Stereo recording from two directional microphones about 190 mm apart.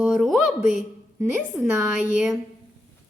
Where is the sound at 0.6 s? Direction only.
40° left (ahead or behind).